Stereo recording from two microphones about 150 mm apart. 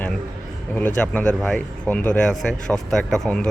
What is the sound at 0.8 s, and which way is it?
Speech, 10° left (ahead or behind).